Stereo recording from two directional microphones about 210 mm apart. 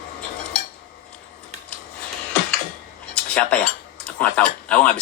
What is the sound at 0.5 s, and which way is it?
Cutlery, 5° left (ahead or behind).